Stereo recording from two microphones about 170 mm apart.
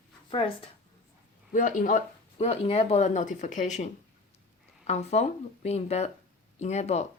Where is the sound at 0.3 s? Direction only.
30° left (ahead or behind).